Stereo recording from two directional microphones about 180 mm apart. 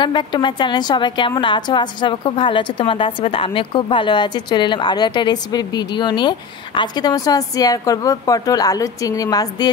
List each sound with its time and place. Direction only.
0.0 s a woman's voice: 25° left (ahead or behind)